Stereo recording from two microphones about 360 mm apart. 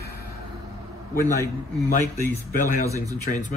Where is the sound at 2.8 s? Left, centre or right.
Centre.